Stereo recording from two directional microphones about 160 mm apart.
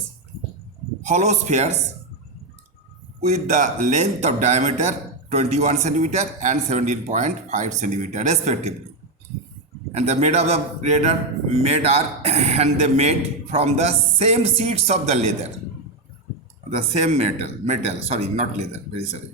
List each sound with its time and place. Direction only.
1.0 s a man's voice: 45° right (ahead or behind)
3.2 s a man's voice: 45° right (ahead or behind)
9.9 s a man's voice: 45° right (ahead or behind)
16.7 s a man's voice: 40° right (ahead or behind)